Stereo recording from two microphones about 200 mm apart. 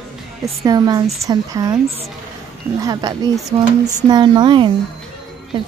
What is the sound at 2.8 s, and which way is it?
A woman's voice, 15° right (ahead or behind).